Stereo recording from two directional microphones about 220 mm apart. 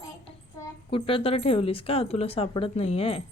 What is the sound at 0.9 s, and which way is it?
Speech, 25° left (ahead or behind).